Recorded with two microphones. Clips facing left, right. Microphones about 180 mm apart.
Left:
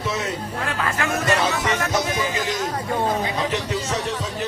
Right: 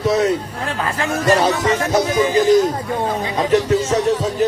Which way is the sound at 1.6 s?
30° right (ahead or behind).